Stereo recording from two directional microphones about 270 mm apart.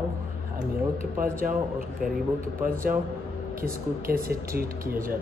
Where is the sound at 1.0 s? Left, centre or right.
Right.